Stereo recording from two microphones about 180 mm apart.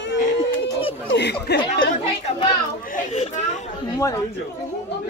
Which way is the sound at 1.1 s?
70° left (ahead or behind).